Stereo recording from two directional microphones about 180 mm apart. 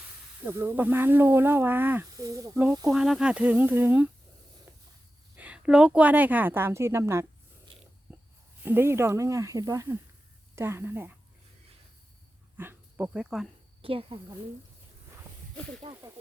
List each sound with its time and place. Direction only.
0.4 s speech: 10° right (ahead or behind)
2.9 s speech: 5° right (ahead or behind)
4.7 s a sound: 15° right (ahead or behind)
5.4 s speech: 5° right (ahead or behind)
8.1 s a sound: 10° right (ahead or behind)
8.6 s speech: 10° right (ahead or behind)
12.5 s speech: 10° right (ahead or behind)
13.8 s speech: 30° right (ahead or behind)
15.8 s speech: 30° right (ahead or behind)